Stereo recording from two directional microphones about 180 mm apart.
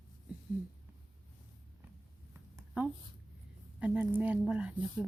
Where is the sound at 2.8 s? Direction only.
10° right (ahead or behind).